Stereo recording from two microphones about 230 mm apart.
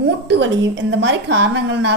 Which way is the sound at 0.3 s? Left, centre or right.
Right.